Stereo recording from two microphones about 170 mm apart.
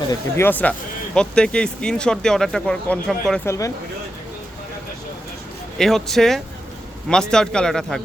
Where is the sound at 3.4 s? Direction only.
15° left (ahead or behind).